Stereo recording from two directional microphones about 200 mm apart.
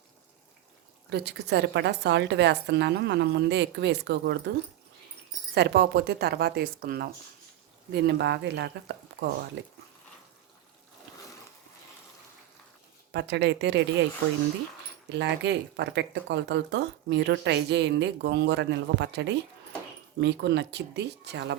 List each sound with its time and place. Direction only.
1.1 s speech: 55° right (ahead or behind)
5.5 s speech: 55° right (ahead or behind)
13.1 s speech: 60° right (ahead or behind)
15.1 s speech: 60° right (ahead or behind)